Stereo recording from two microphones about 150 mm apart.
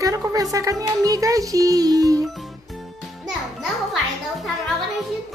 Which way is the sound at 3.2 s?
Centre (ahead or behind).